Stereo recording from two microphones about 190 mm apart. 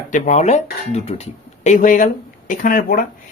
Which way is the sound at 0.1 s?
40° left (ahead or behind).